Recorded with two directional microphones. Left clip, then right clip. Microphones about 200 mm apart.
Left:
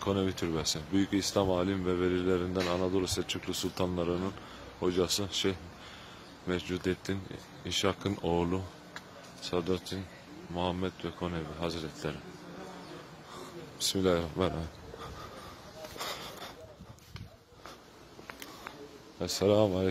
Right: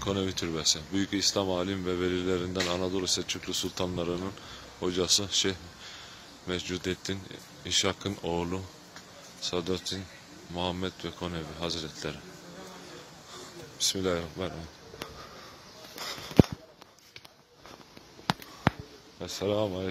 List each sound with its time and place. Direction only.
0.0 s speech: 5° left (ahead or behind)
13.7 s speech: 10° left (ahead or behind)
19.1 s a man's voice: 30° left (ahead or behind)